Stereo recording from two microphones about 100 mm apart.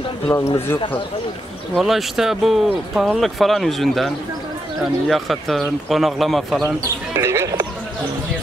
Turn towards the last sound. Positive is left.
turn(degrees=-30)  # may be behind; listen again after turning